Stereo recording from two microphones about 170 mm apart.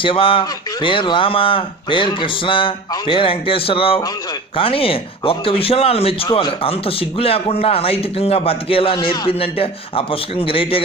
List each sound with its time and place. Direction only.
0.0 s speech: 30° left (ahead or behind)